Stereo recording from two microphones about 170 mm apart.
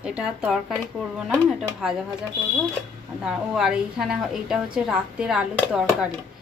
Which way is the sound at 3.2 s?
5° right (ahead or behind).